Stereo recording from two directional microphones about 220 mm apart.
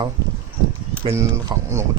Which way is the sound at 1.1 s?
10° right (ahead or behind).